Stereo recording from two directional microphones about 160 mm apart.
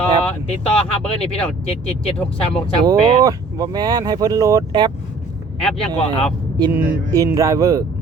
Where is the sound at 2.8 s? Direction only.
20° right (ahead or behind).